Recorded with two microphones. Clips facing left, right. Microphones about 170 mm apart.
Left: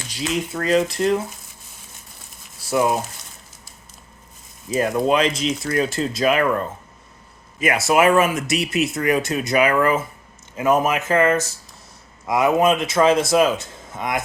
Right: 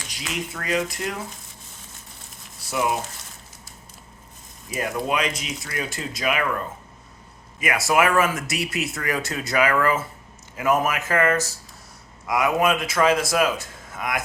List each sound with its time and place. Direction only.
0.1 s speech: 30° left (ahead or behind)
2.6 s speech: 30° left (ahead or behind)
4.7 s speech: 25° left (ahead or behind)